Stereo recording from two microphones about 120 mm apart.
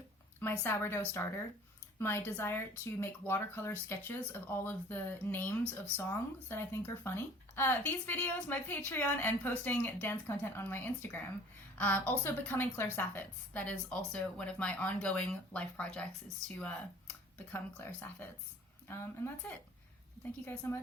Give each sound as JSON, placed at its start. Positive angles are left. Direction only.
{"t": 0.3, "sound": "a woman's voice", "side_deg": 15}
{"t": 18.9, "sound": "a woman's voice", "side_deg": 20}